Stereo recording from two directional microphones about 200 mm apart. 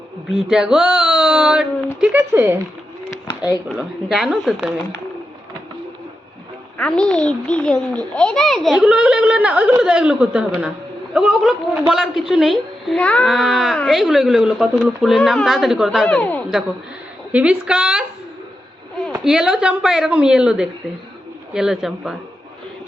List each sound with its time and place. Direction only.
0.3 s a woman's voice: 5° right (ahead or behind)
3.2 s a sound: 20° left (ahead or behind)
3.8 s a woman's voice: centre (ahead or behind)
6.7 s a woman's voice: 5° left (ahead or behind)
19.1 s a woman's voice: 5° right (ahead or behind)